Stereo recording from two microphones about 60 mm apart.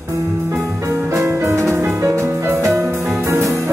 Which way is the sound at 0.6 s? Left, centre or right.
Right.